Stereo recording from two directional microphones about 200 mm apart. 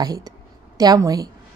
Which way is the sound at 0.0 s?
20° right (ahead or behind).